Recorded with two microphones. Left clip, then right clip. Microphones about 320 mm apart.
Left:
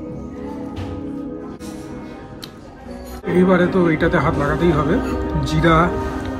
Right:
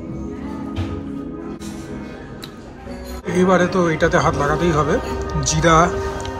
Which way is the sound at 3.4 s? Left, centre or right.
Centre.